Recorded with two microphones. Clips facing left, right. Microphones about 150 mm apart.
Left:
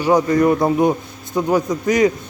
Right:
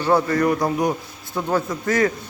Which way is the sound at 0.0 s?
15° left (ahead or behind).